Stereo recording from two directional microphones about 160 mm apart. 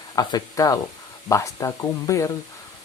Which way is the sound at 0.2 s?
25° left (ahead or behind).